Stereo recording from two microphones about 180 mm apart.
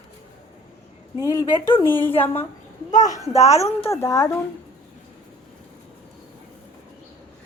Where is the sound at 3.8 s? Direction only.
15° left (ahead or behind).